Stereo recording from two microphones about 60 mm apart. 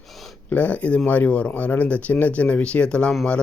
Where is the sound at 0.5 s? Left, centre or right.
Left.